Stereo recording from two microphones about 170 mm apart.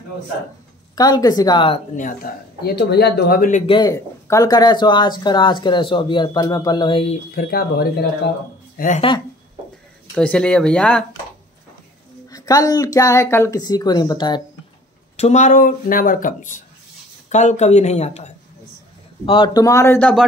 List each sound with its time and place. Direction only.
0.9 s speech: 20° left (ahead or behind)
2.2 s speech: 60° left (ahead or behind)
2.6 s speech: 75° left (ahead or behind); by 3.6 s 50° left (ahead or behind)
3.6 s speech: 25° left (ahead or behind)
7.3 s speech: 65° left (ahead or behind)
8.7 s speech: 50° left (ahead or behind)
10.1 s speech: 5° left (ahead or behind)
12.3 s speech: 20° left (ahead or behind)
15.1 s speech: 40° left (ahead or behind)
19.2 s speech: 30° left (ahead or behind); by 20.2 s 10° left (ahead or behind)